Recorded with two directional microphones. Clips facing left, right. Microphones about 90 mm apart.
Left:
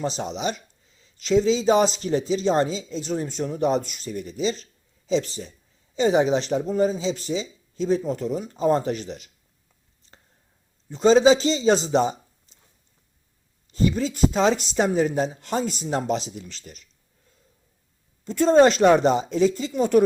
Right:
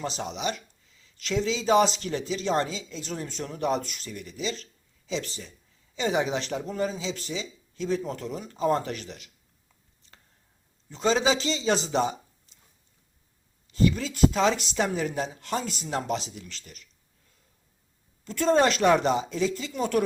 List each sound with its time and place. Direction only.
0.0 s speech: 30° left (ahead or behind)
10.9 s speech: 25° left (ahead or behind)
13.7 s speech: 30° left (ahead or behind)
18.3 s speech: 30° left (ahead or behind)